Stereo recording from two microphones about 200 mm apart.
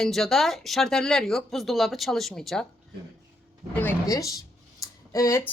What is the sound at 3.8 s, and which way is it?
Speech, 15° left (ahead or behind).